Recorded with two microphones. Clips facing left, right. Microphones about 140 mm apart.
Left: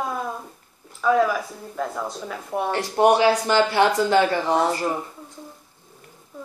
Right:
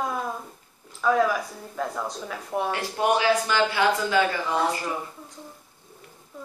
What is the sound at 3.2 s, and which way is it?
Speech, 30° left (ahead or behind).